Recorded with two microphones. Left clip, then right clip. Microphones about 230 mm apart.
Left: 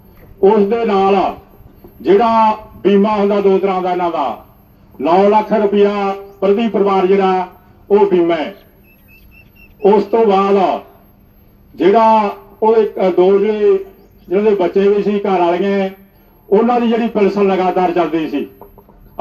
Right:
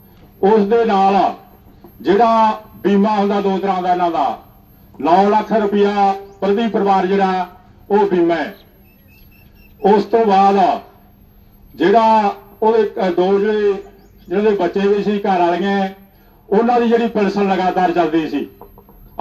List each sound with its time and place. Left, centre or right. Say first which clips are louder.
0.3 s a man's voice: left 1 dB; right
9.8 s a man's voice: left 2 dB; right